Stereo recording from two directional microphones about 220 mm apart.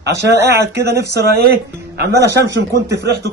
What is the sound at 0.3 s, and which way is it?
Speech, 50° right (ahead or behind).